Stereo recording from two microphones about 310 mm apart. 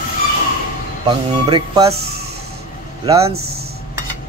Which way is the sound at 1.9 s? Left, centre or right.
Right.